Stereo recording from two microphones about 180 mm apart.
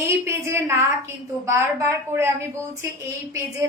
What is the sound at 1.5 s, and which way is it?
Speech, 15° right (ahead or behind).